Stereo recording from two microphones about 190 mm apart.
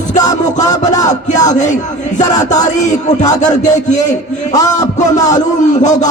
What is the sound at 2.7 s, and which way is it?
A man's voice, 40° left (ahead or behind).